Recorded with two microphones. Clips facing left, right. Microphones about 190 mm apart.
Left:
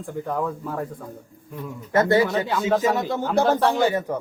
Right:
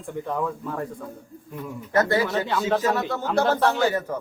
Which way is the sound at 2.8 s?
15° left (ahead or behind).